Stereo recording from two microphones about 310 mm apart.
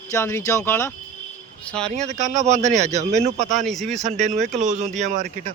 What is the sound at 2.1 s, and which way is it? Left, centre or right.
Speech, right.